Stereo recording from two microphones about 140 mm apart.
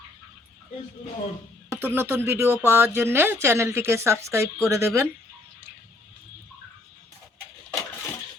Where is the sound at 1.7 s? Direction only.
15° right (ahead or behind).